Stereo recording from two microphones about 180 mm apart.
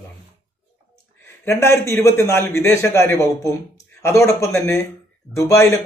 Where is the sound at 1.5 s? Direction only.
15° left (ahead or behind).